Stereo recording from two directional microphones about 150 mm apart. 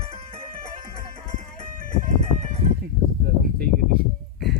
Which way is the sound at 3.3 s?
90° right.